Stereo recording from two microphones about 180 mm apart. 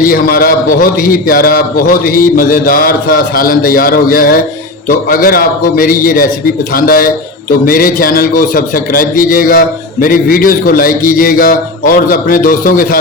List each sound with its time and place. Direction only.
0.0 s a man's voice: 55° left (ahead or behind)